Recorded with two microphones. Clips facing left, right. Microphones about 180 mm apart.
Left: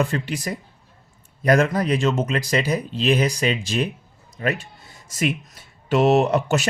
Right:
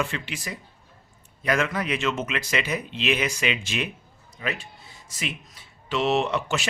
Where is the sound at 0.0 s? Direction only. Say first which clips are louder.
Left 6 dB; 40° left (ahead or behind).